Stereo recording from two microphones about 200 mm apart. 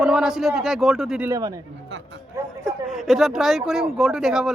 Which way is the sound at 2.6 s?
Centre (ahead or behind).